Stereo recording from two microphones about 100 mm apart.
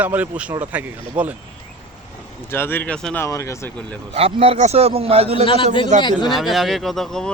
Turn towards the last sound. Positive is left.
turn(degrees=5)  # may be behind; listen again after turning